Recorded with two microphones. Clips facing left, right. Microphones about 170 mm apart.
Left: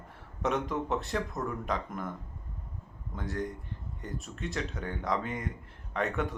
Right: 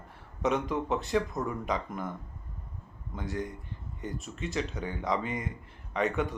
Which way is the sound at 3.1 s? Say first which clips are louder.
Even; centre (ahead or behind).